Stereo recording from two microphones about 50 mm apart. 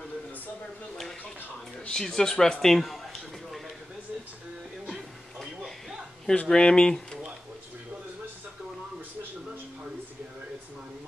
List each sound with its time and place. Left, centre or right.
1.9 s speech: centre
4.9 s a sound: centre
6.3 s speech: centre